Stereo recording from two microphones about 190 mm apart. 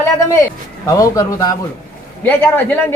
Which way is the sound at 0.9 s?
15° left (ahead or behind).